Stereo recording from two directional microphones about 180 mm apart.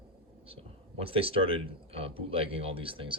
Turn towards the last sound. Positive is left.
turn(degrees=-30)  # may be behind; listen again after turning